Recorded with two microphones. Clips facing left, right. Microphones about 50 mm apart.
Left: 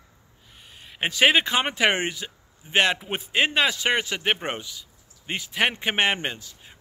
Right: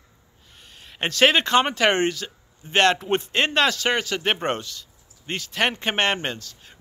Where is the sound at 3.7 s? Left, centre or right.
Left.